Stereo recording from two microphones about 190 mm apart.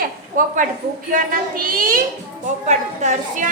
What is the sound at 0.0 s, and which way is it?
A woman's voice, 45° right (ahead or behind).